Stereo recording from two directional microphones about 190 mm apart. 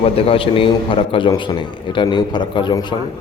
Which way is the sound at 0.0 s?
30° left (ahead or behind).